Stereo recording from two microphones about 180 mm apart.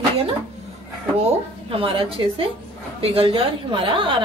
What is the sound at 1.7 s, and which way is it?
A woman's voice, 30° right (ahead or behind).